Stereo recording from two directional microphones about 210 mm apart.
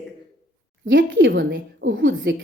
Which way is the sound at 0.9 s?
60° right (ahead or behind).